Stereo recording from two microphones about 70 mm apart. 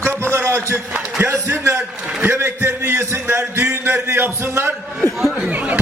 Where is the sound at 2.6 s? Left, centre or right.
Right.